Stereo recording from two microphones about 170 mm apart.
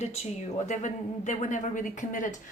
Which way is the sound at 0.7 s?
45° left (ahead or behind).